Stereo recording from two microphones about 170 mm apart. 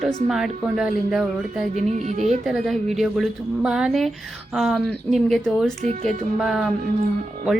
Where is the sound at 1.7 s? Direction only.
40° right (ahead or behind).